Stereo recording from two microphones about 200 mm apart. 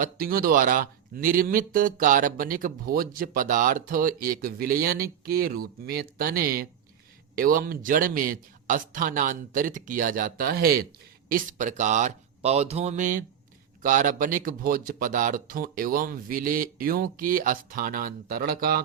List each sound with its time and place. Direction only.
0.0 s speech: 45° right (ahead or behind)